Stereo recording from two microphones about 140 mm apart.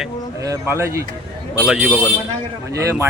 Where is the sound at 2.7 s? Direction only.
20° right (ahead or behind).